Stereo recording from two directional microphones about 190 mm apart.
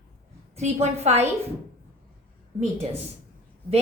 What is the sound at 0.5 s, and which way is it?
Speech, 35° right (ahead or behind).